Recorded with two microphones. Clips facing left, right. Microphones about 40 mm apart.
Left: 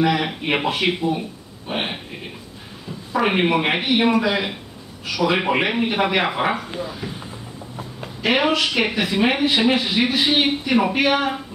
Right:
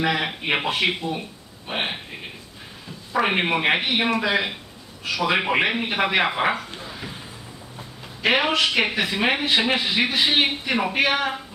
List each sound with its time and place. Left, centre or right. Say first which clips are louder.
0.0 s speech: left 3 dB; centre
3.1 s speech: left 3 dB; centre
6.6 s speech: left 7 dB; centre
8.2 s speech: left 1 dB; centre